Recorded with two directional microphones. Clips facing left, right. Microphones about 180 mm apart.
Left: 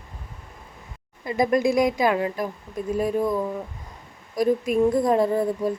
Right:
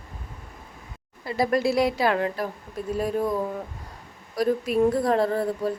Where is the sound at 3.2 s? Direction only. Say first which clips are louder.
Left 2 dB; 10° right (ahead or behind).